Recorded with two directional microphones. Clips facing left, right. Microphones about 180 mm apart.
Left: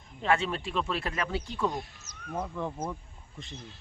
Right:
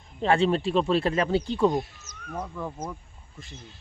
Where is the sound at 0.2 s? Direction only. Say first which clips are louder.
Right 6 dB; 30° right (ahead or behind).